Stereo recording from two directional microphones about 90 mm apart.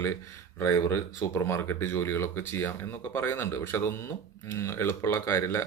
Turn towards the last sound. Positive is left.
turn(degrees=30)  # may be behind; listen again after turning